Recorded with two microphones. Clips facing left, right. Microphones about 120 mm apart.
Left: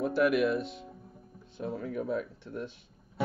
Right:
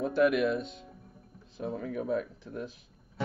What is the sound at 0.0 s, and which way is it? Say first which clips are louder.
Speech: even; centre (ahead or behind).